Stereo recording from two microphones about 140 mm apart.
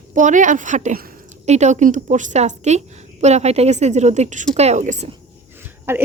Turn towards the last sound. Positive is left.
turn(degrees=-15)  # may be behind; listen again after turning